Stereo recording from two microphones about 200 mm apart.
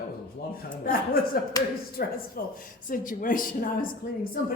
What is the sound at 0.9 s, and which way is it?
A woman's voice, 45° left (ahead or behind).